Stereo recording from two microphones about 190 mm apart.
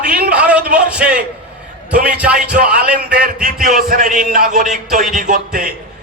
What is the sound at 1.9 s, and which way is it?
Speech, 50° right (ahead or behind).